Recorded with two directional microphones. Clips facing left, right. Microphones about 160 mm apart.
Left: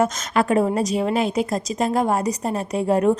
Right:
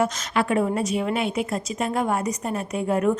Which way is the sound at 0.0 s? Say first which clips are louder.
Left 3 dB; 40° left (ahead or behind).